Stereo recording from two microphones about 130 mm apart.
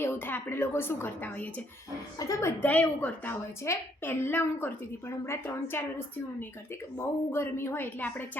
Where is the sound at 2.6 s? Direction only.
10° left (ahead or behind).